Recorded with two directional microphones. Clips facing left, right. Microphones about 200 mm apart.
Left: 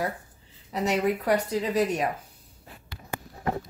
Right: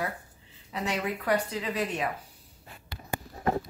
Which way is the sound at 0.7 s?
35° left (ahead or behind).